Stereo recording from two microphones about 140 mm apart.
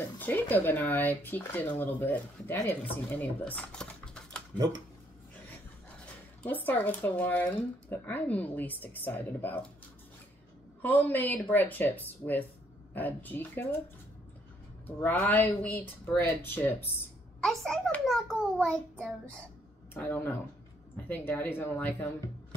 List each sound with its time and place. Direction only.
0.2 s speech: 15° left (ahead or behind)
6.4 s speech: 10° left (ahead or behind)
10.8 s speech: 10° left (ahead or behind)
14.9 s speech: 10° left (ahead or behind)
17.4 s a child's voice: 5° left (ahead or behind)
19.9 s speech: 15° left (ahead or behind)